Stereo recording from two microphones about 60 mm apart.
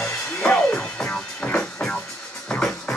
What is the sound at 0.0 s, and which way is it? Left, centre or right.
Music, centre.